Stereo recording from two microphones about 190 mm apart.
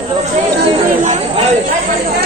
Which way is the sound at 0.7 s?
35° right (ahead or behind).